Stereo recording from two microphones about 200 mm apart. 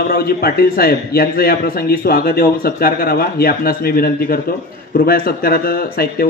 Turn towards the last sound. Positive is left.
turn(degrees=50)  # may be behind; listen again after turning